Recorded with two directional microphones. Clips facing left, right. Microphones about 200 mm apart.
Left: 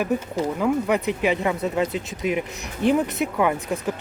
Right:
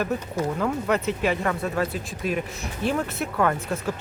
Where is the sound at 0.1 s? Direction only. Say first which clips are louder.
Left 2 dB; 15° left (ahead or behind).